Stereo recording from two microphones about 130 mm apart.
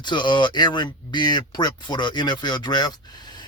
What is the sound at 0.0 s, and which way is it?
Speech, 35° left (ahead or behind).